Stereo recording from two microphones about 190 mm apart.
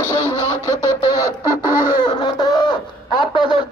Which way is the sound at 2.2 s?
25° left (ahead or behind).